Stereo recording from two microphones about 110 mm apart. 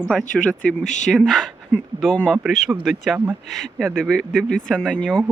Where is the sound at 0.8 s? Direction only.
90° left.